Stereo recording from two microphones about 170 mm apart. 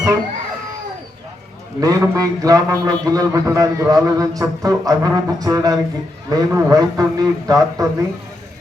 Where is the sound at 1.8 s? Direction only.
20° right (ahead or behind).